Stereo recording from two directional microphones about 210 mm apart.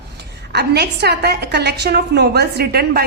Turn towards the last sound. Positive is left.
turn(degrees=-50)  # may be behind; listen again after turning